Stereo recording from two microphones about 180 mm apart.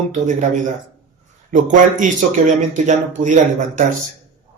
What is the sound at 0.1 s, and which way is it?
Speech, 45° right (ahead or behind).